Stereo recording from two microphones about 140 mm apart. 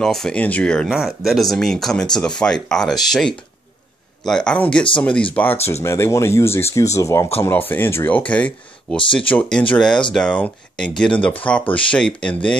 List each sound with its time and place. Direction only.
0.0 s speech: 5° left (ahead or behind)
0.8 s speech: 5° right (ahead or behind)
8.9 s speech: 35° left (ahead or behind)
9.2 s speech: 10° left (ahead or behind)